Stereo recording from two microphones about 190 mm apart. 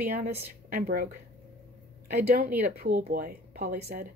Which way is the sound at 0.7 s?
50° right (ahead or behind).